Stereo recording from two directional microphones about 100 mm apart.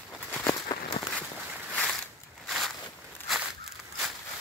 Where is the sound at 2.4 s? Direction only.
Centre (ahead or behind).